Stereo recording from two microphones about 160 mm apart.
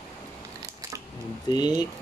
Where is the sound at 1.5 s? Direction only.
25° left (ahead or behind).